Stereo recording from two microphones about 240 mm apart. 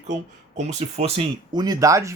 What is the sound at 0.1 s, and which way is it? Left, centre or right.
Speech, right.